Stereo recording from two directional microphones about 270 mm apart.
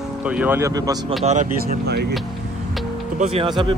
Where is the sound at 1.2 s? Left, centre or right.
Right.